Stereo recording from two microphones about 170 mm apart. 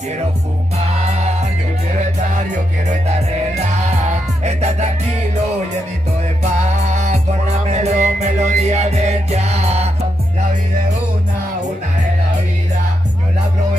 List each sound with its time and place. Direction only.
0.7 s music: 40° right (ahead or behind)
2.9 s music: 40° right (ahead or behind)
6.4 s music: 45° right (ahead or behind)